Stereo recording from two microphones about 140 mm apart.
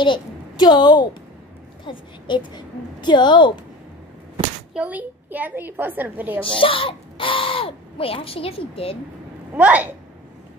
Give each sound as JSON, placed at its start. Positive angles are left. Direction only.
{"t": 0.0, "sound": "a woman's voice", "side_deg": 30}
{"t": 4.7, "sound": "a woman's voice", "side_deg": -10}
{"t": 6.6, "sound": "speech", "side_deg": 40}
{"t": 9.5, "sound": "a woman's voice", "side_deg": -10}